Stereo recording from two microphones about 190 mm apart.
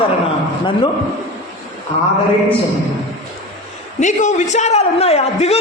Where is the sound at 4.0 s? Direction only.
40° left (ahead or behind).